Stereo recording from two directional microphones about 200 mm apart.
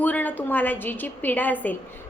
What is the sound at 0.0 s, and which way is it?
A woman's voice, 10° left (ahead or behind).